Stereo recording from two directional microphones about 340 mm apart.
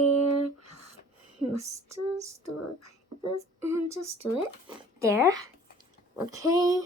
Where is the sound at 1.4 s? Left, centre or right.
Centre.